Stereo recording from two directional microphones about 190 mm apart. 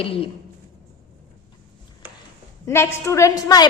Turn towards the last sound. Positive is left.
turn(degrees=20)  # may be behind; listen again after turning